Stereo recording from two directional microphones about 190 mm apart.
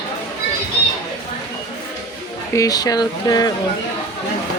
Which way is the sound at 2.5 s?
20° left (ahead or behind).